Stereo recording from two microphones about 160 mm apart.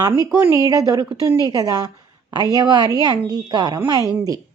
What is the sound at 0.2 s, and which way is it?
A woman's voice, 20° right (ahead or behind).